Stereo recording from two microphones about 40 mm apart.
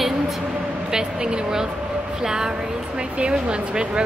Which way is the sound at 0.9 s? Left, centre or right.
Centre.